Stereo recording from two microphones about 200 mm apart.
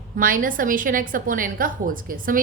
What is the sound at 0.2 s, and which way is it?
A woman's voice, 45° right (ahead or behind).